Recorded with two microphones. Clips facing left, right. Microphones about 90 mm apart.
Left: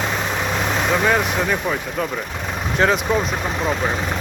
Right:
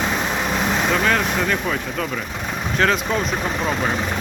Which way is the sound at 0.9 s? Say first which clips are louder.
Left 3 dB; 10° left (ahead or behind).